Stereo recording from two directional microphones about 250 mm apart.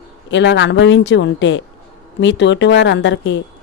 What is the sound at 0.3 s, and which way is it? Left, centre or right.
A woman's voice, left.